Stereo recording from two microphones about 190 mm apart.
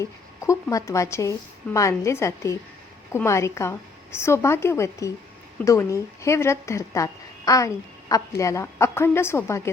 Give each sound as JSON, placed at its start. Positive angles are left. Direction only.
{"t": 0.0, "sound": "a woman's voice", "side_deg": 15}